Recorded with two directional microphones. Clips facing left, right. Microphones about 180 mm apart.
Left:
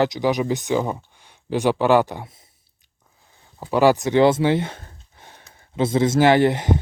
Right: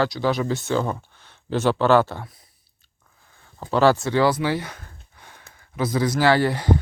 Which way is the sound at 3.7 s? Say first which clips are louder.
Left 2 dB; 15° left (ahead or behind).